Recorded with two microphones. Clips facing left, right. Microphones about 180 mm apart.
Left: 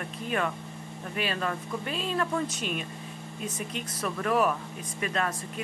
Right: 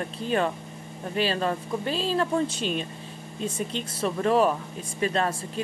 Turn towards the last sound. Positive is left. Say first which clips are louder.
# right 5 dB
turn(degrees=-30)  # may be behind; listen again after turning